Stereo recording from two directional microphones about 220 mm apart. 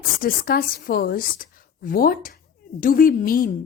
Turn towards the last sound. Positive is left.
turn(degrees=40)  # may be behind; listen again after turning